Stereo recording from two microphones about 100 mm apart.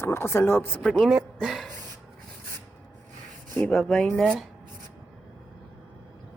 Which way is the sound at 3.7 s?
5° left (ahead or behind).